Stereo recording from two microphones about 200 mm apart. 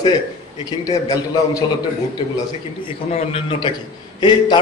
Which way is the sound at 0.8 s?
20° left (ahead or behind).